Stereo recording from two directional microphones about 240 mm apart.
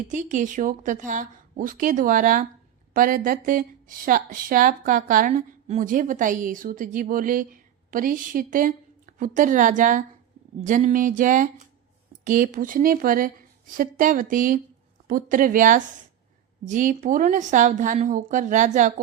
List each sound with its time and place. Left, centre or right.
0.1 s speech: right